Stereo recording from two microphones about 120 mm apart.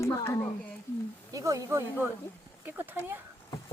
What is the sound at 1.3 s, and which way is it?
Speech, 30° right (ahead or behind).